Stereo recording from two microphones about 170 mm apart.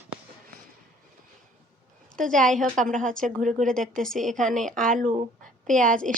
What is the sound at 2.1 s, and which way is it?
A woman's voice, 50° right (ahead or behind).